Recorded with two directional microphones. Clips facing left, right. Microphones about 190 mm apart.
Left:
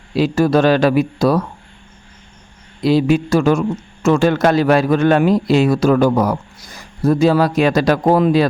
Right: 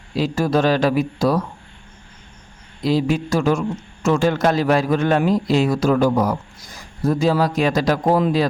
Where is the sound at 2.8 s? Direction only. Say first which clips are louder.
Left 5 dB; 70° left (ahead or behind).